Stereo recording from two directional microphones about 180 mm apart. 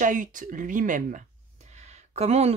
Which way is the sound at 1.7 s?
40° right (ahead or behind).